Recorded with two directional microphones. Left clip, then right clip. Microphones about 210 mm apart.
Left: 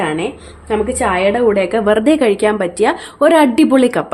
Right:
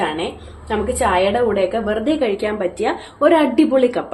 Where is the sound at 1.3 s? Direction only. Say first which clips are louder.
Left 4 dB; 50° left (ahead or behind).